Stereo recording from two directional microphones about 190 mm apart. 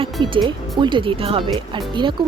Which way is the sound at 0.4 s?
25° right (ahead or behind).